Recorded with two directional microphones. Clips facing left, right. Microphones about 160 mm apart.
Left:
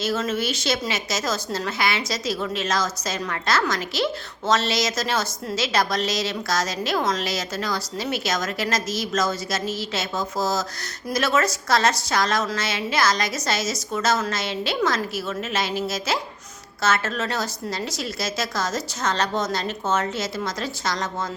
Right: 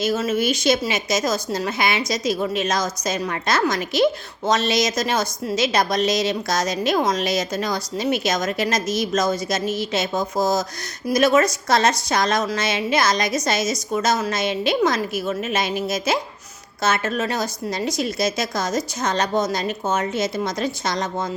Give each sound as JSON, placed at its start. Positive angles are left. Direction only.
{"t": 0.0, "sound": "a woman's voice", "side_deg": -10}